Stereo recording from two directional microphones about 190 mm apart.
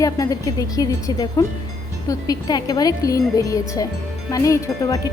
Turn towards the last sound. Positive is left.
turn(degrees=15)  # may be behind; listen again after turning